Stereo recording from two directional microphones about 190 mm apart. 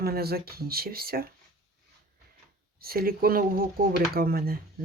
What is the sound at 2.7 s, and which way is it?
Speech, 50° right (ahead or behind).